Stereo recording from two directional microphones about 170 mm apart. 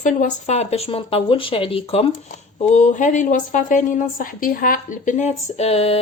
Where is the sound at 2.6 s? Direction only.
45° left (ahead or behind).